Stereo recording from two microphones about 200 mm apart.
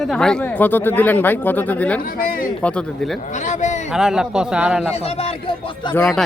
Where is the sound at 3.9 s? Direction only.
5° right (ahead or behind).